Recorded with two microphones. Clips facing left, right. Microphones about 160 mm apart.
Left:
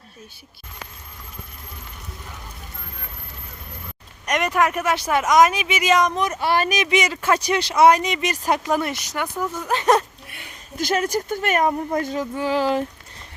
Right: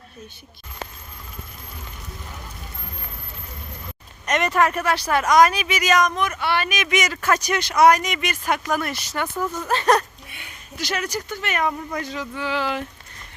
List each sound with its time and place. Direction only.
4.3 s speech: 10° left (ahead or behind)
10.8 s speech: 45° left (ahead or behind)